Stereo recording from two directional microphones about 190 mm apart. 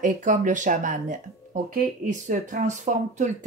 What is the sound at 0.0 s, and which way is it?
Speech, 40° right (ahead or behind).